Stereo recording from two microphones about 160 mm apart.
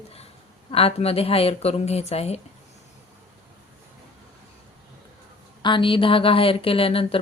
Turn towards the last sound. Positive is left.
turn(degrees=35)  # may be behind; listen again after turning